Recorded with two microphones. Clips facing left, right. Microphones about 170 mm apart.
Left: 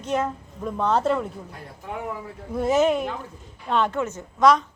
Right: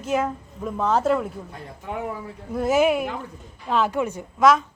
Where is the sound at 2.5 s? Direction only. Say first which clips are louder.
Right 1 dB; centre (ahead or behind).